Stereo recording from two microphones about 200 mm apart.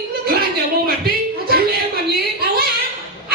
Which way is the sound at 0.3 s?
50° right (ahead or behind).